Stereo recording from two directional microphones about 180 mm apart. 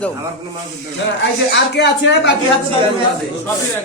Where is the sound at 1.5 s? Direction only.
75° left (ahead or behind).